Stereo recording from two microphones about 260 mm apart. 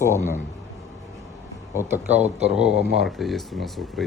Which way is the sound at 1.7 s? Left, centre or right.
Centre.